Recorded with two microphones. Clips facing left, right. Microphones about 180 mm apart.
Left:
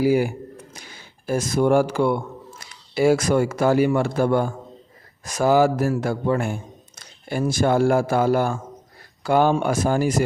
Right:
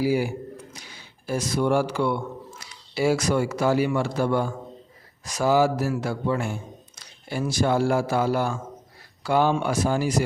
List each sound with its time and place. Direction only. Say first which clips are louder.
0.0 s a man's voice: left 4 dB; 50° left (ahead or behind)